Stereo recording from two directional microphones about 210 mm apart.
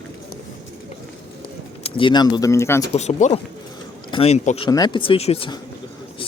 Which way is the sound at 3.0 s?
35° left (ahead or behind).